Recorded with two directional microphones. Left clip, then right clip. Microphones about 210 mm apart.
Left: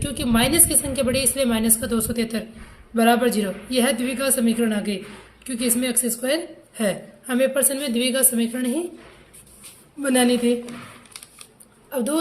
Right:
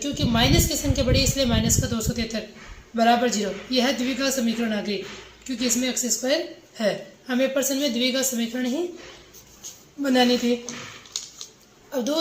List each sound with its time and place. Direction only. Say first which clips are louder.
0.0 s a woman's voice: left 1 dB; 50° left (ahead or behind)
10.0 s a woman's voice: left 1 dB; 50° left (ahead or behind)
11.9 s a woman's voice: left 2 dB; 50° left (ahead or behind)